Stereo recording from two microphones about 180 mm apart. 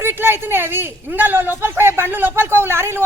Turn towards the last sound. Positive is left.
turn(degrees=-15)  # may be behind; listen again after turning